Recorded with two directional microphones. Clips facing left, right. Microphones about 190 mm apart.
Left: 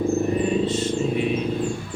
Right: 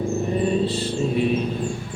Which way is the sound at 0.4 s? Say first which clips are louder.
Even; 35° right (ahead or behind).